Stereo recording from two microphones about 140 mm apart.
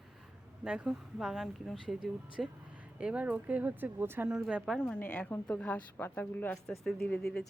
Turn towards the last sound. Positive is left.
turn(degrees=5)  # may be behind; listen again after turning